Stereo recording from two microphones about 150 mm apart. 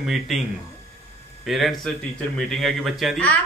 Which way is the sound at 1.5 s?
Centre (ahead or behind).